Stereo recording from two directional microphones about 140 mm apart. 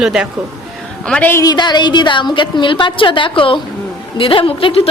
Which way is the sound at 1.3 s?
30° left (ahead or behind).